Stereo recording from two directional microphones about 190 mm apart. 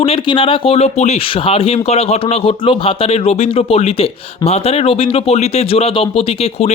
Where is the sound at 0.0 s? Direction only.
30° left (ahead or behind).